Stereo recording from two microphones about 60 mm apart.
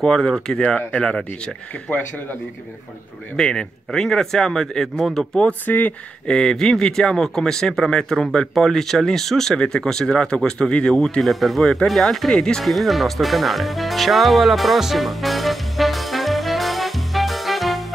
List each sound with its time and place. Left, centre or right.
0.0 s speech: centre
3.3 s speech: centre
5.7 s speech: left
6.2 s speech: centre